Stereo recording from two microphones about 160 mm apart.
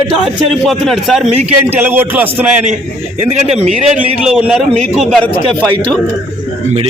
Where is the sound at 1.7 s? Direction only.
10° right (ahead or behind).